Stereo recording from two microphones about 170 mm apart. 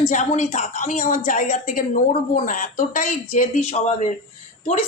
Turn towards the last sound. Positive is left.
turn(degrees=40)  # may be behind; listen again after turning